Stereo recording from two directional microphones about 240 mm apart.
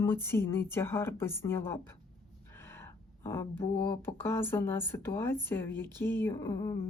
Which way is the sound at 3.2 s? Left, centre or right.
Centre.